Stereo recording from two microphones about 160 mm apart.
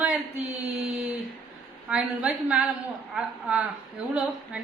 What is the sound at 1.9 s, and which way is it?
A woman's voice, 5° right (ahead or behind).